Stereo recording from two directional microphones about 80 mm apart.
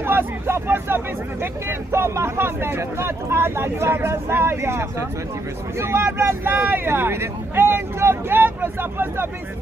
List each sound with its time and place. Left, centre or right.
0.0 s speech: right